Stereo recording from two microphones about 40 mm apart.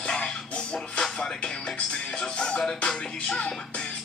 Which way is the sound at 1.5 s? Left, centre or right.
Left.